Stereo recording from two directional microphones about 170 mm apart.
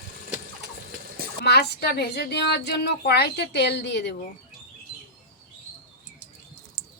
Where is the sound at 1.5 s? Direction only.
75° left (ahead or behind).